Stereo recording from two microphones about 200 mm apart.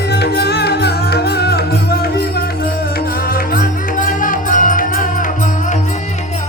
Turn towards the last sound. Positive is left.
turn(degrees=40)  # may be behind; listen again after turning